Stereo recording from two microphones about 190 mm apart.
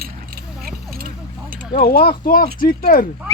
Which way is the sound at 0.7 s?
50° right (ahead or behind).